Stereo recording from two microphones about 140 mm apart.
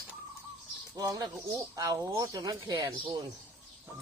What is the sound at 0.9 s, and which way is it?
Speech, 25° right (ahead or behind).